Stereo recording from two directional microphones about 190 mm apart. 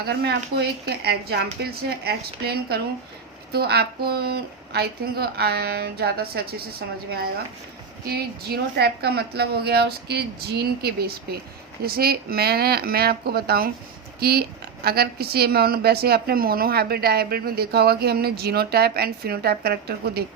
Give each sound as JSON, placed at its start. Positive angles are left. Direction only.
{"t": 0.0, "sound": "speech", "side_deg": -60}